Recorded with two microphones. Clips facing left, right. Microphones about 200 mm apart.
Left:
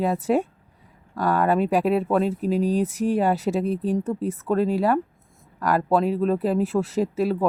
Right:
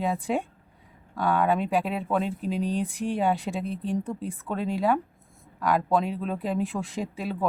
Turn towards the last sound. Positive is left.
turn(degrees=5)  # may be behind; listen again after turning